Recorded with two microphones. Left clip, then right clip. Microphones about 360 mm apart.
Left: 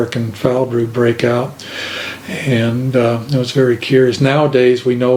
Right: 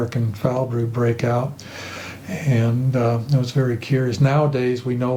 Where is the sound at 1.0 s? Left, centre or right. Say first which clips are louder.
Left 7 dB; right.